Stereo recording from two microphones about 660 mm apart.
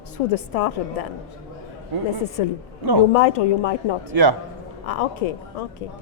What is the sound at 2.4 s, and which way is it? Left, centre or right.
Speech, left.